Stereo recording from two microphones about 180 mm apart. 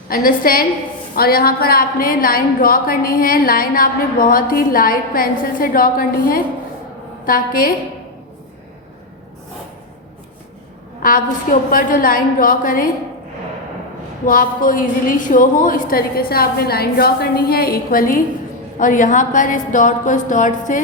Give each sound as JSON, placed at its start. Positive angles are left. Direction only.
{"t": 0.1, "sound": "a woman's voice", "side_deg": 50}
{"t": 11.7, "sound": "a woman's voice", "side_deg": 50}
{"t": 14.3, "sound": "a woman's voice", "side_deg": 50}